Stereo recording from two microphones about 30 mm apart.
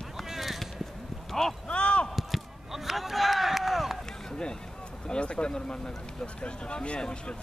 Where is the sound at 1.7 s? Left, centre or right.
Left.